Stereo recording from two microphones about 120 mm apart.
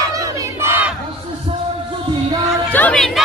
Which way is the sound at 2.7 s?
15° left (ahead or behind).